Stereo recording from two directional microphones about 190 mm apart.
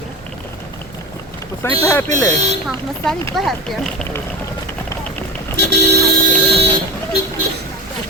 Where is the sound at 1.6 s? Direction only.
15° left (ahead or behind).